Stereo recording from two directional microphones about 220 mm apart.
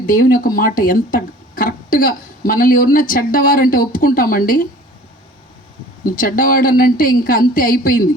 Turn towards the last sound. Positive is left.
turn(degrees=40)  # may be behind; listen again after turning